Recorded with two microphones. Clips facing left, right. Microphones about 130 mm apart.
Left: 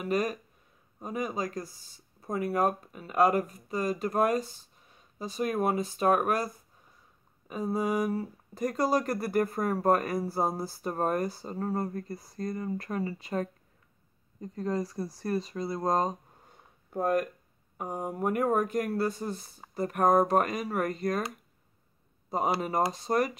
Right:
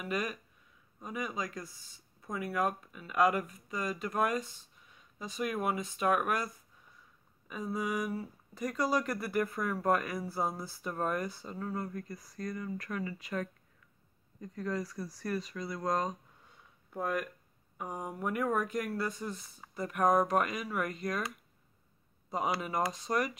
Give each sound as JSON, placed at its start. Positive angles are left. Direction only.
{"t": 0.0, "sound": "speech", "side_deg": 40}
{"t": 16.4, "sound": "a sound", "side_deg": 45}
{"t": 17.7, "sound": "speech", "side_deg": 45}
{"t": 22.3, "sound": "speech", "side_deg": 40}